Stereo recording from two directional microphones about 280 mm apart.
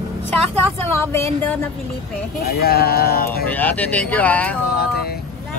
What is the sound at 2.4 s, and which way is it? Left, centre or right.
Speech, left.